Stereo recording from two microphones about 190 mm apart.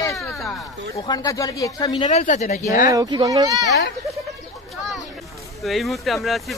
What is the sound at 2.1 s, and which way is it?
Speech, 40° left (ahead or behind).